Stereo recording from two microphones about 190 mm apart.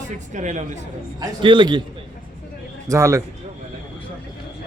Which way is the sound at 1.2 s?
25° right (ahead or behind).